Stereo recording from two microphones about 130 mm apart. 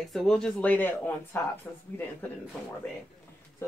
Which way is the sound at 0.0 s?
Centre (ahead or behind).